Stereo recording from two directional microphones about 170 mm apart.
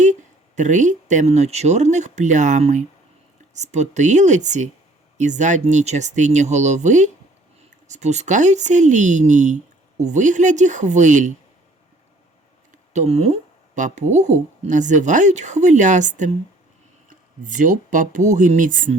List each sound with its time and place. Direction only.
0.0 s speech: 45° right (ahead or behind)
12.9 s speech: 40° right (ahead or behind)